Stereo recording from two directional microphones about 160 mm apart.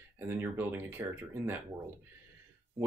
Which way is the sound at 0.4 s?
10° right (ahead or behind).